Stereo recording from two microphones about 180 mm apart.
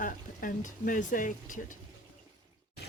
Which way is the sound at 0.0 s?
50° left (ahead or behind).